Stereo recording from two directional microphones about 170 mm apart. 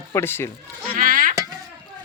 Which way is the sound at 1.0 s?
55° right (ahead or behind).